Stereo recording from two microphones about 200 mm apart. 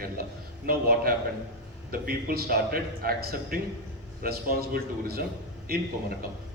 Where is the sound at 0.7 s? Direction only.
50° right (ahead or behind).